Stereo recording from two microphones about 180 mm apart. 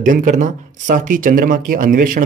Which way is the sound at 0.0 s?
45° right (ahead or behind).